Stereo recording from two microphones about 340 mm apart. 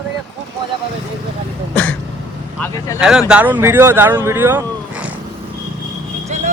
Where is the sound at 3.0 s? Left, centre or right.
Centre.